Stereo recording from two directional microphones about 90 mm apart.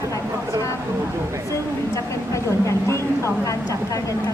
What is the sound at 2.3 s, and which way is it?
Speech, 30° left (ahead or behind).